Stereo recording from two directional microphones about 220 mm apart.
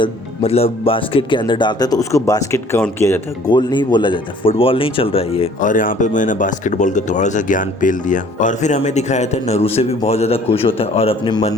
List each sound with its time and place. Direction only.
0.0 s speech: 25° left (ahead or behind)